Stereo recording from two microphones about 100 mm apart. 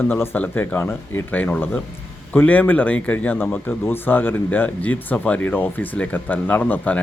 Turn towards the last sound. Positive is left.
turn(degrees=15)  # may be behind; listen again after turning